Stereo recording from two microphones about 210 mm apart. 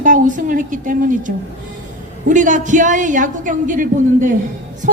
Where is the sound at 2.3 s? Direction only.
35° right (ahead or behind).